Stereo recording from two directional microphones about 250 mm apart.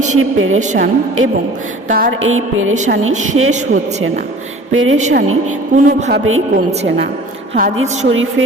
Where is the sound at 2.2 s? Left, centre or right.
Right.